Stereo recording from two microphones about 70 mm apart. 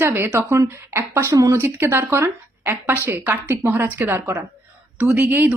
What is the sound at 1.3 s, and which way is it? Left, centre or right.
Speech, right.